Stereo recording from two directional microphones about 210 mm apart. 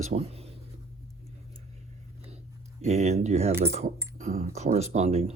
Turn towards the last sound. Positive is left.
turn(degrees=-30)  # may be behind; listen again after turning